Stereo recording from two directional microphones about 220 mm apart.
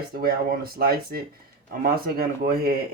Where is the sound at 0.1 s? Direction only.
45° right (ahead or behind).